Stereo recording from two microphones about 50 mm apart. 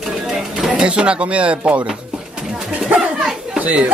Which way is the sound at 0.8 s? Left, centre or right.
Right.